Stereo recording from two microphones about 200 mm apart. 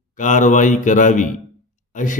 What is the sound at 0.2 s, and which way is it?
Speech, 40° left (ahead or behind).